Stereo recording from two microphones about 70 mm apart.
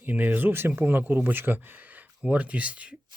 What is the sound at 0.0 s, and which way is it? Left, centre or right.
Speech, right.